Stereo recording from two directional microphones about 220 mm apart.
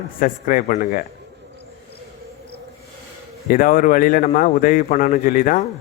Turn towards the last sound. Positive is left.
turn(degrees=40)  # may be behind; listen again after turning